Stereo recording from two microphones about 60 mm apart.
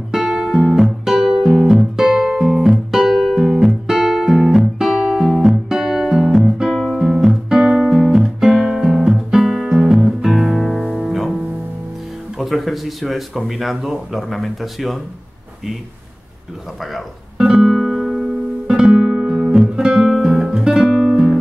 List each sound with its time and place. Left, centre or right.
0.1 s guitar: centre
3.4 s music: centre
12.4 s speech: centre
16.9 s guitar: centre
20.9 s guitar: centre